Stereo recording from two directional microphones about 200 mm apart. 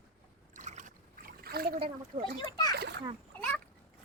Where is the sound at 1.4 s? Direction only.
50° right (ahead or behind).